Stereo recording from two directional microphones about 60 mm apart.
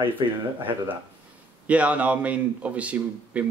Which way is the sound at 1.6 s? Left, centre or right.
Right.